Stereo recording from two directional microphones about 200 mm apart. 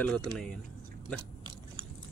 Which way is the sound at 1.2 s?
25° right (ahead or behind).